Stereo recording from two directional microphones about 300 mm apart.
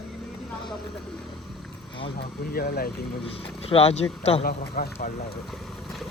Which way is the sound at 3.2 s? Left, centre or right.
Centre.